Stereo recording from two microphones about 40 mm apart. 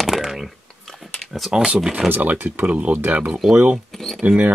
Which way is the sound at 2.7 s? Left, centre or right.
Right.